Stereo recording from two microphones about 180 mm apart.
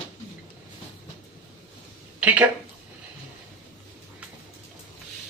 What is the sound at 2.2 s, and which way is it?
Speech, 10° right (ahead or behind).